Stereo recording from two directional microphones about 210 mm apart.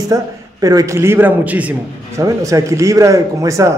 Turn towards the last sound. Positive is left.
turn(degrees=-15)  # may be behind; listen again after turning